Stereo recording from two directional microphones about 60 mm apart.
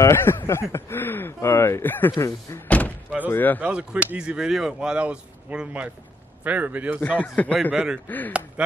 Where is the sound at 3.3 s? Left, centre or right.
Left.